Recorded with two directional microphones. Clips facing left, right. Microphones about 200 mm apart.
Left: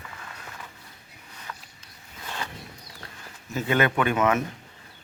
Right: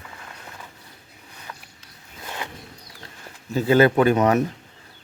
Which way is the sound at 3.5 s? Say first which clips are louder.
Right 7 dB; 30° right (ahead or behind).